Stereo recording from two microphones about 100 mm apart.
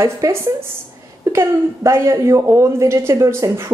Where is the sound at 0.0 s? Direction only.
30° right (ahead or behind).